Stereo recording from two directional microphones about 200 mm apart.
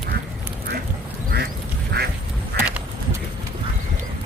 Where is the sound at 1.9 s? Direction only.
55° right (ahead or behind).